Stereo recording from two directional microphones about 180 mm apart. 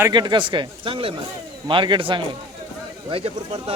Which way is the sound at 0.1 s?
25° right (ahead or behind).